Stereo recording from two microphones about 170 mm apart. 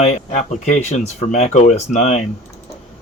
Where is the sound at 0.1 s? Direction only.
40° left (ahead or behind).